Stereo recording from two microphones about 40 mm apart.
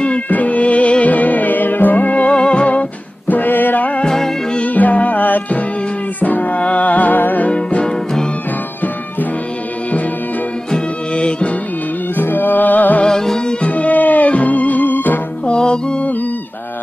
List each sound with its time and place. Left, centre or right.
0.3 s music: left
3.3 s a sound: left
4.0 s music: centre
4.6 s music: left
7.4 s music: left
7.8 s music: centre
11.1 s music: left
12.2 s music: left
13.0 s music: centre
13.6 s music: left
15.4 s music: left